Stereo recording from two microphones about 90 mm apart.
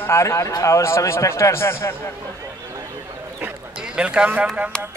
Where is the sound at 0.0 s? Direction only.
30° left (ahead or behind).